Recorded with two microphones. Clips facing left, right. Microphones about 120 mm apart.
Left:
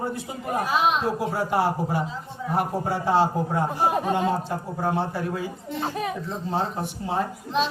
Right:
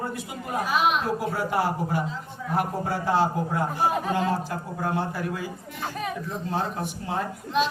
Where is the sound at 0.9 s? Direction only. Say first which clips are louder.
Left 1 dB; 25° left (ahead or behind).